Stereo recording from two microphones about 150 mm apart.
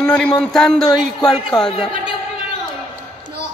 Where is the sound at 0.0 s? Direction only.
5° left (ahead or behind).